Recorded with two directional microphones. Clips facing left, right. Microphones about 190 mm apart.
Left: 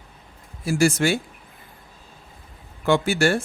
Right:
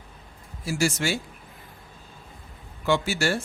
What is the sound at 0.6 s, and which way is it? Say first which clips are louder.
Speech: left 6 dB; 55° left (ahead or behind).